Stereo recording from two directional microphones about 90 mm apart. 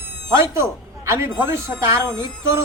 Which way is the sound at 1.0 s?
30° right (ahead or behind).